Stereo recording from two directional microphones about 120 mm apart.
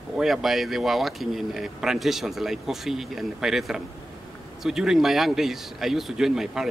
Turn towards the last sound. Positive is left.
turn(degrees=-5)  # may be behind; listen again after turning